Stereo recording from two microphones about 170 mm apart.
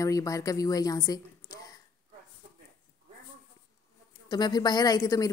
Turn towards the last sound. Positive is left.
turn(degrees=20)  # may be behind; listen again after turning